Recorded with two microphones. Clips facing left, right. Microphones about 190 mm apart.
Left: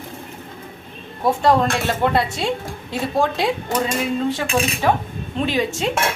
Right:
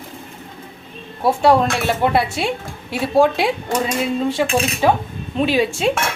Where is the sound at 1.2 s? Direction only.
10° right (ahead or behind).